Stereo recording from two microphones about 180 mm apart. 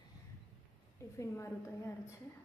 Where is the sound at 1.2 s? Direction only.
15° left (ahead or behind).